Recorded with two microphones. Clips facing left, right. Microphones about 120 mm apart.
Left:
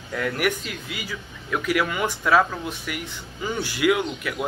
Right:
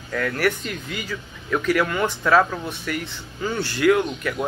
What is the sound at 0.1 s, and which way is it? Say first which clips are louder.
A man's voice: right 2 dB; 15° left (ahead or behind).